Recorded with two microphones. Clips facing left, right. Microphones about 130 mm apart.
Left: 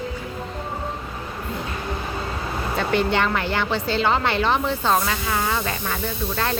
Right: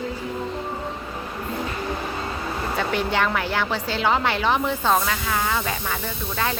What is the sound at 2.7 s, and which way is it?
A woman's voice, 5° right (ahead or behind).